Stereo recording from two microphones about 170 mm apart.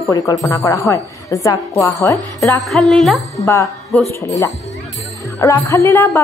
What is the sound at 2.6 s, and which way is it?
Music, centre (ahead or behind).